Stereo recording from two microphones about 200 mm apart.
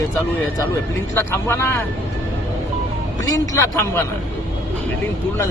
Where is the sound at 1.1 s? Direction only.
10° left (ahead or behind).